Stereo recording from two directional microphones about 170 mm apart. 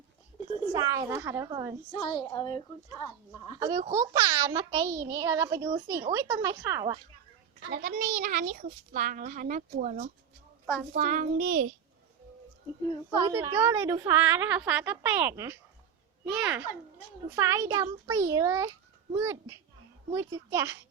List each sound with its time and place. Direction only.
0.7 s a child's voice: 20° right (ahead or behind)
2.0 s a woman's voice: 30° left (ahead or behind)
3.6 s a child's voice: 25° right (ahead or behind)
7.7 s a child's voice: 60° right (ahead or behind)
8.1 s speech: 50° right (ahead or behind)
13.2 s a woman's voice: 20° right (ahead or behind)
17.3 s a child's voice: 15° right (ahead or behind)